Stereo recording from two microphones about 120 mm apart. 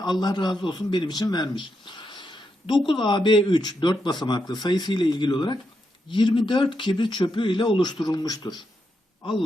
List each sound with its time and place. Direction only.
0.0 s speech: 35° left (ahead or behind)